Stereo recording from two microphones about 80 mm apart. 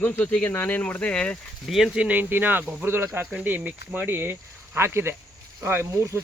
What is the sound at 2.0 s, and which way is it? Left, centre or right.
Speech, right.